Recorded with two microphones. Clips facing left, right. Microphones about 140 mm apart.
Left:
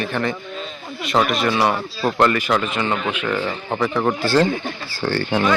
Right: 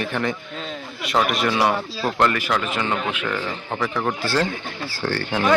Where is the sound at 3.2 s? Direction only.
10° left (ahead or behind).